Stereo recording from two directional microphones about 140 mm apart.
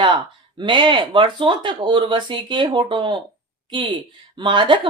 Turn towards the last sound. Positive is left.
turn(degrees=-35)  # may be behind; listen again after turning